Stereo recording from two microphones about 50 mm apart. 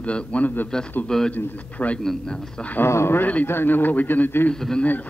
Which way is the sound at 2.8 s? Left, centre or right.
Left.